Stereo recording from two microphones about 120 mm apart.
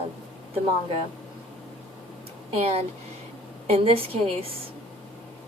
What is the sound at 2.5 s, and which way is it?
A woman's voice, 55° right (ahead or behind).